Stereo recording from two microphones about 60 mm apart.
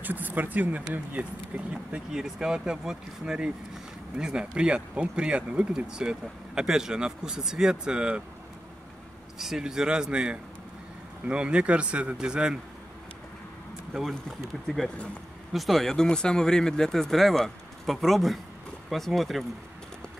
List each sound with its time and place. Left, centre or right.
0.0 s a man's voice: right
1.7 s speech: centre
9.4 s a man's voice: centre
15.5 s speech: centre